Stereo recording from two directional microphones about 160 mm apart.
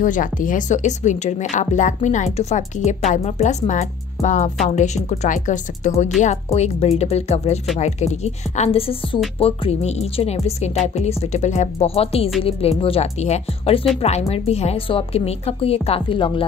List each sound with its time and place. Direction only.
0.0 s a woman's voice: 55° left (ahead or behind); by 16.4 s 30° left (ahead or behind)